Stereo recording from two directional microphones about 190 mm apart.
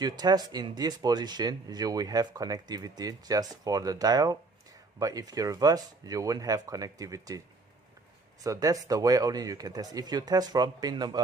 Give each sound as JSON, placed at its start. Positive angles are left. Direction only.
{"t": 0.0, "sound": "speech", "side_deg": -20}
{"t": 8.4, "sound": "speech", "side_deg": -20}